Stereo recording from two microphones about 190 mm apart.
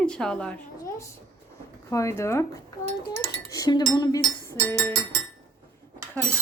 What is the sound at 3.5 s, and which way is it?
Cutlery, 20° left (ahead or behind).